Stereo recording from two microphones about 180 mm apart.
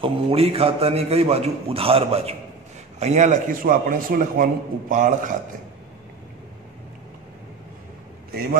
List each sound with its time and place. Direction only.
0.0 s a man's voice: 35° right (ahead or behind)